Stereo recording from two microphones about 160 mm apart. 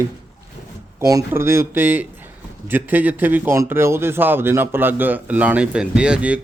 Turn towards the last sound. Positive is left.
turn(degrees=-5)  # may be behind; listen again after turning